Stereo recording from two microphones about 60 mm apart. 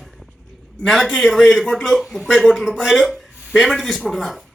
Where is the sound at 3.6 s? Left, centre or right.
Centre.